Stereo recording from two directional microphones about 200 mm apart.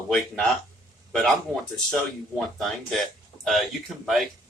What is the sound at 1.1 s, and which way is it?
Speech, centre (ahead or behind).